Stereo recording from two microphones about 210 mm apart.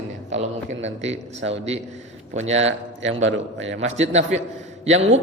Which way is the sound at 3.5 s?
60° right (ahead or behind).